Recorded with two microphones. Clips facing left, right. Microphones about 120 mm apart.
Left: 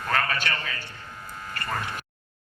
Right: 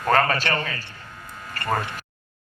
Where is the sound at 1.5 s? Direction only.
50° right (ahead or behind).